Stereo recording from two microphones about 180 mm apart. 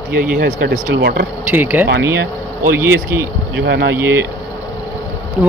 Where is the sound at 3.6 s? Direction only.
65° right (ahead or behind).